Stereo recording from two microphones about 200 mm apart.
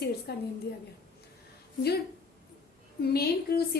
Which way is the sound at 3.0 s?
50° left (ahead or behind).